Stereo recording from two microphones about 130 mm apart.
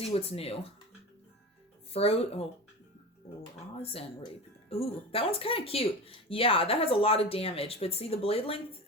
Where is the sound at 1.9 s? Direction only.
50° left (ahead or behind).